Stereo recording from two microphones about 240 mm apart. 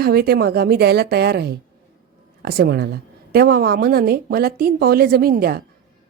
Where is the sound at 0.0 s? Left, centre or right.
Right.